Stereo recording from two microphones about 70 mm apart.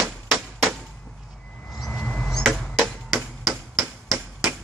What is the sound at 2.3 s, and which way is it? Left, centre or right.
Cat, centre.